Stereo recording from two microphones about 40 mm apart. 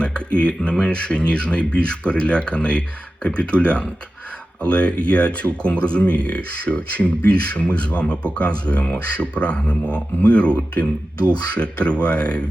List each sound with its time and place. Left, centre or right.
0.0 s speech: left
11.5 s speech: left